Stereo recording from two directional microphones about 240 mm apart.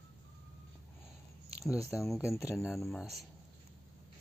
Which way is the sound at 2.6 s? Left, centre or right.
Centre.